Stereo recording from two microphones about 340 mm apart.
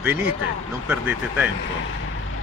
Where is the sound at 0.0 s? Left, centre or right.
Centre.